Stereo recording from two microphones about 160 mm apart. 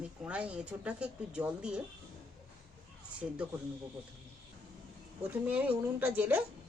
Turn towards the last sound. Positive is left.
turn(degrees=-10)  # may be behind; listen again after turning